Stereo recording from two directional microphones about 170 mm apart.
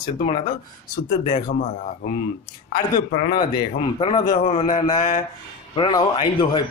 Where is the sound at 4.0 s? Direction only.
30° left (ahead or behind).